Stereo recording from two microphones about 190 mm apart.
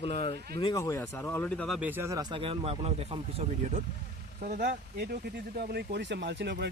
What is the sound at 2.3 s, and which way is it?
Speech, 30° right (ahead or behind).